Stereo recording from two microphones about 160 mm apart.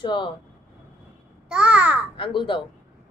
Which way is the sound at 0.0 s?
30° left (ahead or behind).